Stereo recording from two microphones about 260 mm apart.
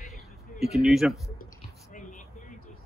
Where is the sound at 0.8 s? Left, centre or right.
Centre.